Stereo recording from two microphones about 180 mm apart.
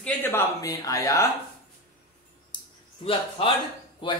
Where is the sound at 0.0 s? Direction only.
10° left (ahead or behind).